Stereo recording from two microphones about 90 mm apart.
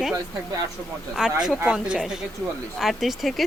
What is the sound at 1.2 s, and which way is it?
Speech, 5° right (ahead or behind).